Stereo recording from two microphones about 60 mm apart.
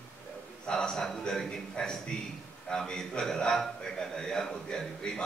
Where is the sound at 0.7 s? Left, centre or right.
Centre.